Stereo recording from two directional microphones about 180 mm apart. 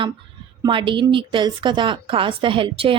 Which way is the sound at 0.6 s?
25° right (ahead or behind).